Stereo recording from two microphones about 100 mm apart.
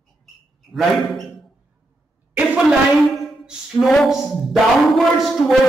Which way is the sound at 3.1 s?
Centre (ahead or behind).